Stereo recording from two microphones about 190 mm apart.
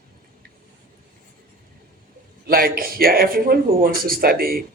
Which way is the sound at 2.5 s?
50° right (ahead or behind).